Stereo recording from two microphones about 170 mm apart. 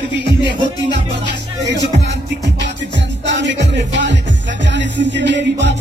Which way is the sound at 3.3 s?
90° right.